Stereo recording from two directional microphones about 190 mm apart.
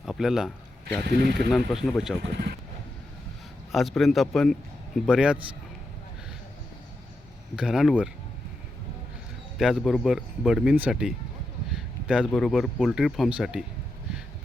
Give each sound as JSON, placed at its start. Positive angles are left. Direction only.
{"t": 0.0, "sound": "speech", "side_deg": 0}
{"t": 1.0, "sound": "speech", "side_deg": -55}
{"t": 1.5, "sound": "speech", "side_deg": 0}
{"t": 3.7, "sound": "speech", "side_deg": 0}
{"t": 7.5, "sound": "speech", "side_deg": -5}
{"t": 9.6, "sound": "speech", "side_deg": 0}
{"t": 11.7, "sound": "a sound", "side_deg": -5}
{"t": 12.2, "sound": "speech", "side_deg": 5}